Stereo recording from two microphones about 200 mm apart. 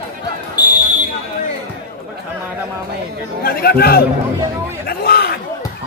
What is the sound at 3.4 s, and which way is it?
Speech, 50° left (ahead or behind).